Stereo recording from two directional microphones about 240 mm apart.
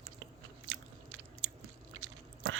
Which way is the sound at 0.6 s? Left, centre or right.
Right.